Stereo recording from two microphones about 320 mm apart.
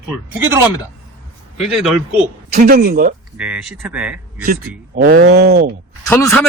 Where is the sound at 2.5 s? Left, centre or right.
Right.